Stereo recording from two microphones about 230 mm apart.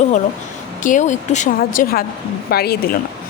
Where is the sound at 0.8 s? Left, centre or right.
Left.